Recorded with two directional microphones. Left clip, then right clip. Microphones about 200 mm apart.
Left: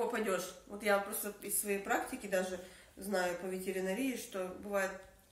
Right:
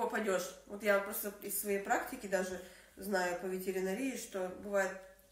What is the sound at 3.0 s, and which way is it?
Speech, 15° left (ahead or behind).